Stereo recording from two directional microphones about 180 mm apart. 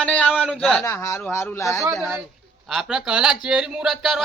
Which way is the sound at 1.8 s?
Centre (ahead or behind).